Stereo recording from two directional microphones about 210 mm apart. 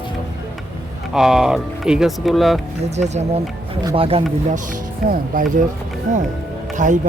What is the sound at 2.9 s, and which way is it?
Speech, 30° right (ahead or behind).